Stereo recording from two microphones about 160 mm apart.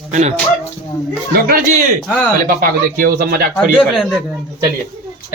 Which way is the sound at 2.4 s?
60° right (ahead or behind).